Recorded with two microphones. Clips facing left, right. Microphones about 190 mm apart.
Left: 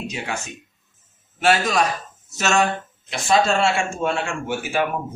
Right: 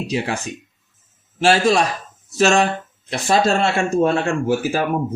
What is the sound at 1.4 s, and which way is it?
A man's voice, 30° right (ahead or behind).